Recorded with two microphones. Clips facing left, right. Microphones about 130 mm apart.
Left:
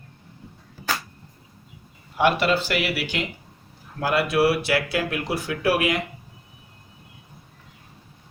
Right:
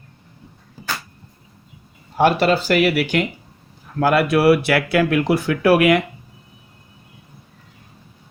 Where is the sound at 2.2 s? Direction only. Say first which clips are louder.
Right 4 dB; 40° right (ahead or behind); by 6.0 s 65° right (ahead or behind).